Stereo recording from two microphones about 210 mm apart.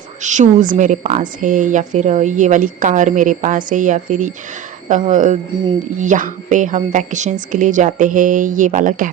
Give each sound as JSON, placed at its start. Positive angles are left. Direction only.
{"t": 0.2, "sound": "speech", "side_deg": -35}